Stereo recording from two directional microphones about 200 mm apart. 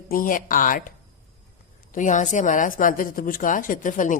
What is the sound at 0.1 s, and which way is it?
A woman's voice, 45° left (ahead or behind).